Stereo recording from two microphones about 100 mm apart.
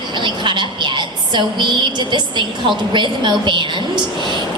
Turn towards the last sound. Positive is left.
turn(degrees=-50)  # may be behind; listen again after turning